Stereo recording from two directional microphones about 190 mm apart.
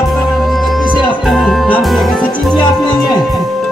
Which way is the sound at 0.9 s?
Centre (ahead or behind).